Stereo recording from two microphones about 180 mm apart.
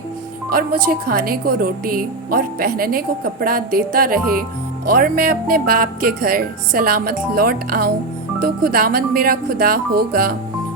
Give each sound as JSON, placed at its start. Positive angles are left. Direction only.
{"t": 0.5, "sound": "speech", "side_deg": -55}